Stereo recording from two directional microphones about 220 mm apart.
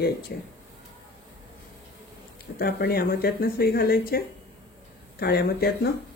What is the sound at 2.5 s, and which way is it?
Speech, 45° left (ahead or behind).